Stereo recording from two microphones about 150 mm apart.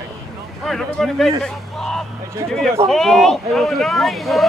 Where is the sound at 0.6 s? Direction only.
Centre (ahead or behind).